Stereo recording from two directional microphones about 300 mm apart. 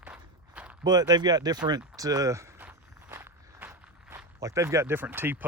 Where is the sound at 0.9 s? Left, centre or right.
Centre.